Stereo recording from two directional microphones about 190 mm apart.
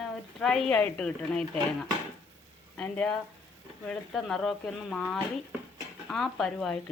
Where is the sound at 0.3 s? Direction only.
Centre (ahead or behind).